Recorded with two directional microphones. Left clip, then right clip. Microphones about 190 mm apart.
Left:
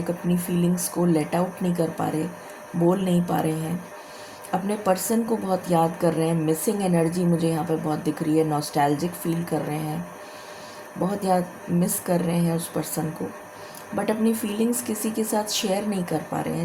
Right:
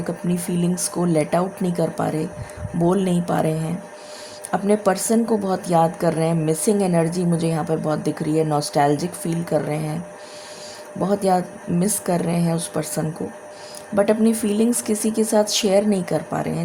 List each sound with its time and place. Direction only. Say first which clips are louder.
0.3 s speech: right 1 dB; 40° right (ahead or behind)
11.0 s speech: right 4 dB; 45° right (ahead or behind)